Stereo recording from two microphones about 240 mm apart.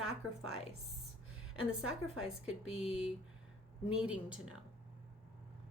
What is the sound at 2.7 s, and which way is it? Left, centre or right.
Speech, centre.